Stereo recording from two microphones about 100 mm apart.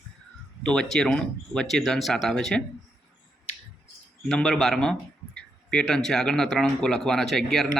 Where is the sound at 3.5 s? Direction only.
90° left.